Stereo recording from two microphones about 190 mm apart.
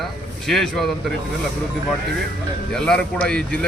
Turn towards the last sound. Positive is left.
turn(degrees=5)  # may be behind; listen again after turning